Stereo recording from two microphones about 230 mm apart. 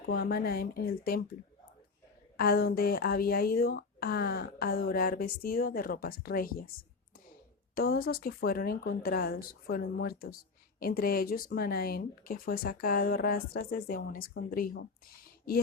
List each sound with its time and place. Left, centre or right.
0.0 s a woman's voice: left
2.3 s a woman's voice: left
7.8 s a woman's voice: left